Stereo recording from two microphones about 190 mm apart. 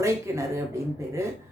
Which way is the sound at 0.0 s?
15° right (ahead or behind).